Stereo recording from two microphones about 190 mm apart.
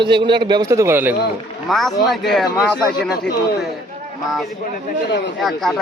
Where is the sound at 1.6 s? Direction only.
Centre (ahead or behind).